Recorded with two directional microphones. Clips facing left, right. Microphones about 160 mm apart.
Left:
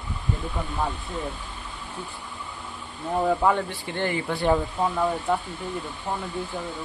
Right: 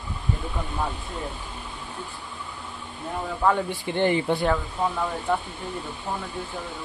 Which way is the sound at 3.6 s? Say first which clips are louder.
Right 4 dB; 15° right (ahead or behind).